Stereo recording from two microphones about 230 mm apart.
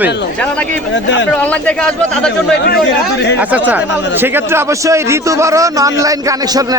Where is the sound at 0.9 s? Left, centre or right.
Left.